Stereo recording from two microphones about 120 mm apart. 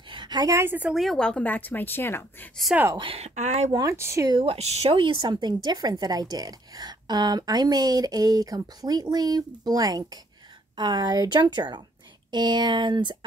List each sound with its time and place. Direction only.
0.1 s a sound: 40° right (ahead or behind)
0.6 s speech: 15° right (ahead or behind)
0.9 s a woman's voice: centre (ahead or behind); by 2.5 s 20° left (ahead or behind)
3.0 s speech: 50° right (ahead or behind)
3.3 s speech: 70° right (ahead or behind)
3.9 s speech: 20° right (ahead or behind)
4.3 s speech: 45° right (ahead or behind)
4.6 s a woman's voice: 60° right (ahead or behind); by 13.2 s 40° right (ahead or behind)